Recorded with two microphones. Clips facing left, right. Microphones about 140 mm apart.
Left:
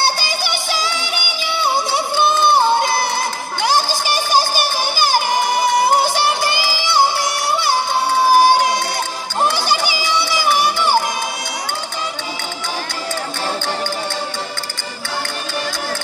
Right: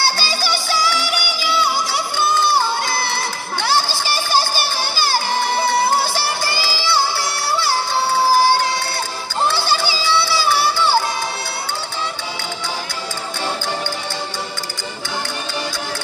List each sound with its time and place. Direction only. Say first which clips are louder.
0.0 s music: left 1 dB; 20° left (ahead or behind)
3.6 s crowd: left 2 dB; 15° left (ahead or behind)
9.4 s a sound: left 1 dB; 15° left (ahead or behind)